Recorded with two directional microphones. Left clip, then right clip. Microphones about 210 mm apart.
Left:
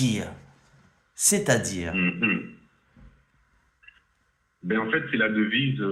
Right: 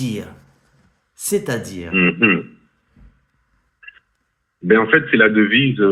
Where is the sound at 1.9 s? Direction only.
45° right (ahead or behind).